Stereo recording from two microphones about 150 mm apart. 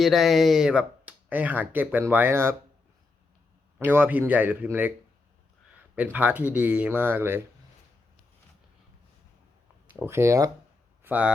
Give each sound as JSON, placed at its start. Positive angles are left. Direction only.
{"t": 0.0, "sound": "speech", "side_deg": 0}
{"t": 3.8, "sound": "speech", "side_deg": -10}
{"t": 6.1, "sound": "speech", "side_deg": -10}
{"t": 10.1, "sound": "speech", "side_deg": -20}
{"t": 11.0, "sound": "a sound", "side_deg": -10}